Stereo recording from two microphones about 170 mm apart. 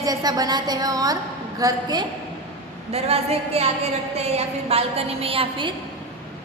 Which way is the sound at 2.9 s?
35° right (ahead or behind).